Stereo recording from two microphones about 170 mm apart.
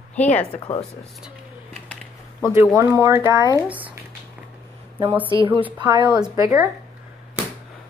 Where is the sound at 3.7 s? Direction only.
10° right (ahead or behind).